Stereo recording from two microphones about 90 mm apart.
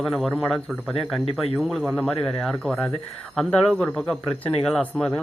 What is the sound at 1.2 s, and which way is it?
Speech, 90° left.